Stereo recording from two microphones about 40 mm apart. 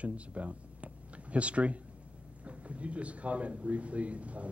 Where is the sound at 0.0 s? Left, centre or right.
Right.